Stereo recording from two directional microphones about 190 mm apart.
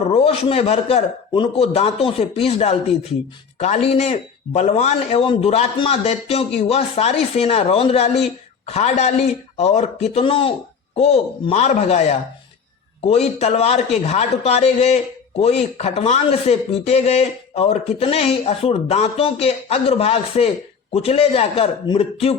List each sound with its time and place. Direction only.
0.1 s speech: 30° left (ahead or behind)